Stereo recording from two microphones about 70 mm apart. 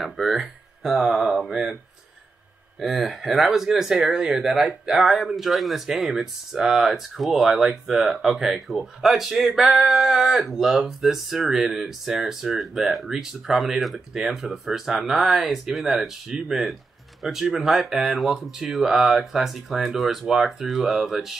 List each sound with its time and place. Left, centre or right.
0.0 s speech: centre
2.8 s speech: centre